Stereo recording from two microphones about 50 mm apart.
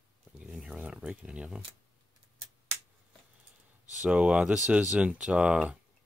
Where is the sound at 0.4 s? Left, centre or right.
Centre.